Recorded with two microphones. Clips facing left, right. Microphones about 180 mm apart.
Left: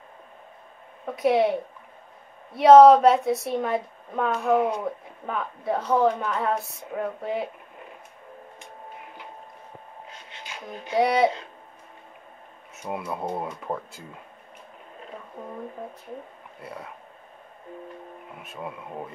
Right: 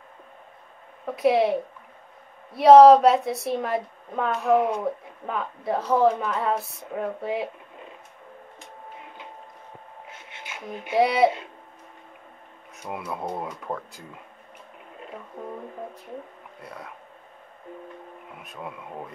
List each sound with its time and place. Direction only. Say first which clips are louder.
1.1 s speech: even; centre (ahead or behind)
2.5 s speech: right 1 dB; centre (ahead or behind)
10.7 s speech: right 2 dB; 15° right (ahead or behind)
11.0 s speech: right 1 dB; 5° right (ahead or behind)
12.8 s speech: left 1 dB; centre (ahead or behind)
16.6 s speech: left 2 dB; 5° left (ahead or behind)
18.4 s speech: left 1 dB; centre (ahead or behind)